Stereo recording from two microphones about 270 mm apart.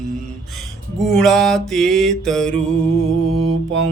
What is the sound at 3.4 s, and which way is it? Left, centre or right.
Mantra, right.